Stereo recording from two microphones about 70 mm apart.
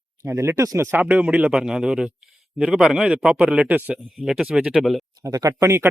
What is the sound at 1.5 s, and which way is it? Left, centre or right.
Speech, centre.